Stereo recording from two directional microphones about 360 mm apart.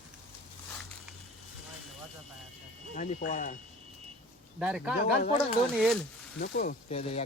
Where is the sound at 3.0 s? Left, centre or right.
Left.